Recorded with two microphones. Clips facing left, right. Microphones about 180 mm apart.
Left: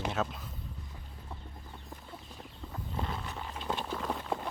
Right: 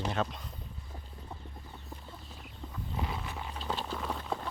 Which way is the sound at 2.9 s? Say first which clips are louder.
Even; 5° right (ahead or behind).